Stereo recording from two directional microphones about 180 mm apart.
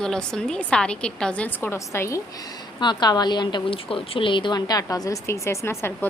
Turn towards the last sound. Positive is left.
turn(degrees=15)  # may be behind; listen again after turning